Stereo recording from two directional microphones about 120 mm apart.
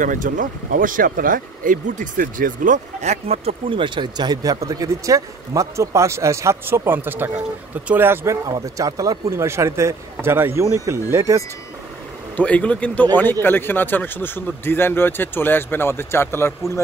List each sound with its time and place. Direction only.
0.0 s speech: 90° right
1.7 s speech: 90° right; by 11.4 s 25° right (ahead or behind)
12.4 s a man's voice: 10° left (ahead or behind)